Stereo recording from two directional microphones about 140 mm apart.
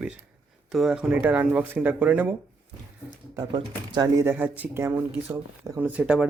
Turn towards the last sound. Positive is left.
turn(degrees=-10)  # may be behind; listen again after turning